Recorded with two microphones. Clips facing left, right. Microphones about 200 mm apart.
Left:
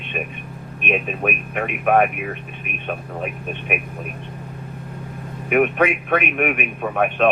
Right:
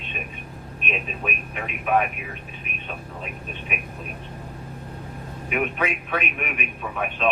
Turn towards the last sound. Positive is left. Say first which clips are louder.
# left 8 dB
turn(degrees=60)  # may be behind; listen again after turning